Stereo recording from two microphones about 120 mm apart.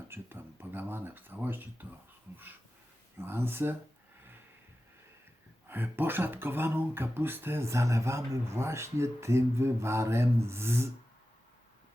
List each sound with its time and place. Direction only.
0.1 s speech: 15° right (ahead or behind)
3.2 s speech: 20° right (ahead or behind)
5.6 s speech: 15° right (ahead or behind)